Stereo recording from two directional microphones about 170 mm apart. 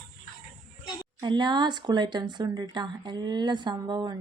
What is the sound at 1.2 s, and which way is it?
Speech, 25° right (ahead or behind).